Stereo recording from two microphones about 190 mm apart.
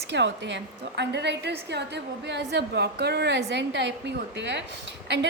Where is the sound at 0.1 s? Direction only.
65° right (ahead or behind).